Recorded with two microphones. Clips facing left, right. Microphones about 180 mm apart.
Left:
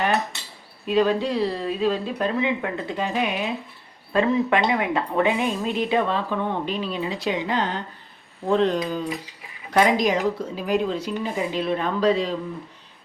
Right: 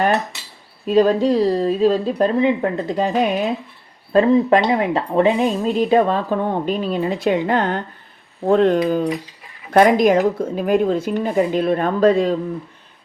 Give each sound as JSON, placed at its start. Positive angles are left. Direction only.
{"t": 0.9, "sound": "speech", "side_deg": -40}